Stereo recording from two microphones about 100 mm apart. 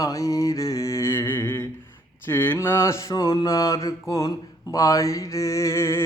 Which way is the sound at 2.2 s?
20° left (ahead or behind).